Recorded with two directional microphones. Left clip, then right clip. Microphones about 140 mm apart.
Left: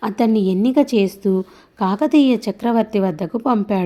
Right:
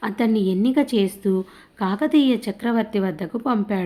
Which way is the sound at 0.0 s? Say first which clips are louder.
Left 4 dB; 35° left (ahead or behind).